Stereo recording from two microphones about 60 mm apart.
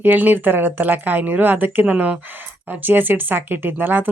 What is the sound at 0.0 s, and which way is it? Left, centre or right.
Speech, right.